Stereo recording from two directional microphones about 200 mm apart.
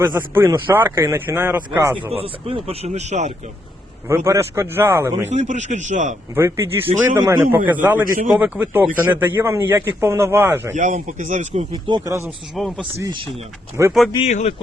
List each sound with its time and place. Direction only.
0.0 s speech: 15° right (ahead or behind)
2.1 s speech: 30° right (ahead or behind)
4.1 s speech: 15° right (ahead or behind)
5.3 s speech: 35° right (ahead or behind)
6.3 s speech: 15° right (ahead or behind)
10.8 s speech: 40° right (ahead or behind)
11.7 s speech: 20° right (ahead or behind)
12.5 s speech: centre (ahead or behind)
12.8 s speech: 25° right (ahead or behind)
13.8 s speech: 15° right (ahead or behind)
14.3 s speech: 35° left (ahead or behind)